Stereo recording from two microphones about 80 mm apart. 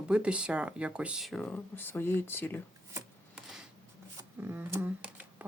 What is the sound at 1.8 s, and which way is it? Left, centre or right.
Speech, left.